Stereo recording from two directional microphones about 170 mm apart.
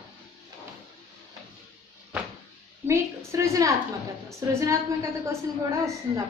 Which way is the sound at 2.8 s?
15° right (ahead or behind).